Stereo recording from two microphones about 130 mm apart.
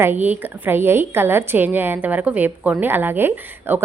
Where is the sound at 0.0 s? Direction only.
15° right (ahead or behind).